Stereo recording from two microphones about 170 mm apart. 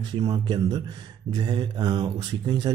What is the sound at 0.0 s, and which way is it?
Speech, 25° right (ahead or behind).